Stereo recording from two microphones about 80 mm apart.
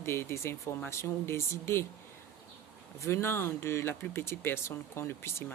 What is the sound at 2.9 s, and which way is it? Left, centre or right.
Speech, left.